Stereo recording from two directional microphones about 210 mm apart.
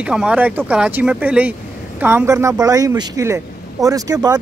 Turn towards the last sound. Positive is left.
turn(degrees=-15)  # may be behind; listen again after turning